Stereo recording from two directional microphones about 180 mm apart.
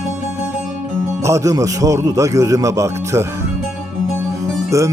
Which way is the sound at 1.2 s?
15° right (ahead or behind).